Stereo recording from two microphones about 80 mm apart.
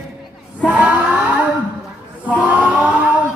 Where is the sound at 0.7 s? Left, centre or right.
Centre.